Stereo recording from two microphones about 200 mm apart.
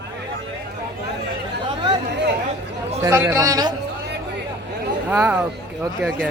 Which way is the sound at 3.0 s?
15° right (ahead or behind).